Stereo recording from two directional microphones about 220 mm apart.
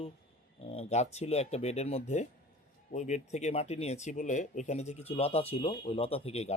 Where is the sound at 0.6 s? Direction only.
30° left (ahead or behind).